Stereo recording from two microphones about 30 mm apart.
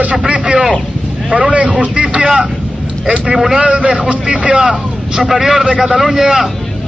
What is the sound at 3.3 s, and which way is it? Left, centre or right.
Speech, centre.